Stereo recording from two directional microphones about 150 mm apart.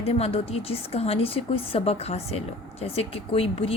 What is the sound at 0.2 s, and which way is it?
A woman's voice, 40° left (ahead or behind).